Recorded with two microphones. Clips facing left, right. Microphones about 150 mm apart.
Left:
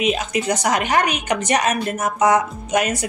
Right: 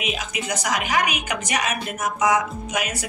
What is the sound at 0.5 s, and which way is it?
A woman's voice, 45° left (ahead or behind).